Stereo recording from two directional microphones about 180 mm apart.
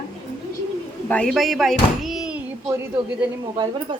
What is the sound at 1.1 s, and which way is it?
Speech, 5° left (ahead or behind).